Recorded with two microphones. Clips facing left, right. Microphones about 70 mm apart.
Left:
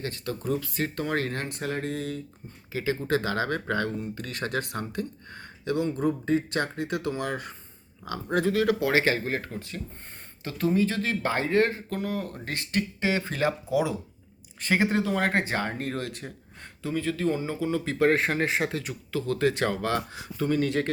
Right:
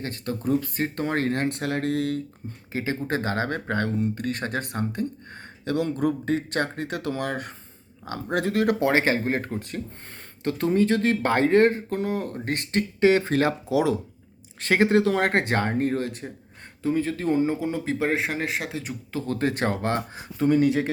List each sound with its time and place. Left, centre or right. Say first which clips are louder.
0.0 s speech: right 3 dB; right
1.5 s speech: right 5 dB; right
2.7 s speech: even; right
5.7 s speech: right 2 dB; right
8.0 s speech: right 1 dB; right
8.4 s speech: right 1 dB; right
13.7 s speech: right 2 dB; right
14.6 s speech: right 5 dB; right
15.9 s speech: right 5 dB; right
18.1 s speech: left 2 dB; centre
18.7 s speech: even; right
20.0 s speech: right 4 dB; right